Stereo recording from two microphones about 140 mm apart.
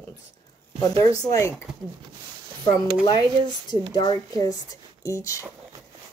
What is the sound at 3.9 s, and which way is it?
Speech, 30° left (ahead or behind).